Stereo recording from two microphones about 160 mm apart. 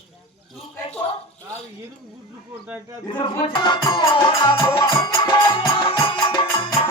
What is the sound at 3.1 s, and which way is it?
Music, 30° left (ahead or behind).